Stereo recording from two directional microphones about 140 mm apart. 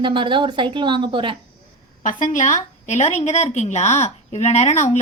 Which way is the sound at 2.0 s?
65° left (ahead or behind).